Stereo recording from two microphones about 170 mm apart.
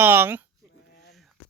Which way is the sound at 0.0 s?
10° right (ahead or behind).